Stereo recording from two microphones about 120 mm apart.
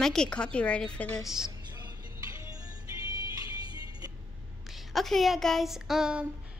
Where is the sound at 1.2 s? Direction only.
5° right (ahead or behind).